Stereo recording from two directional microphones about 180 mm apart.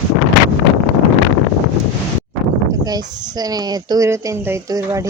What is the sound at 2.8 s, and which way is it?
Speech, 20° right (ahead or behind).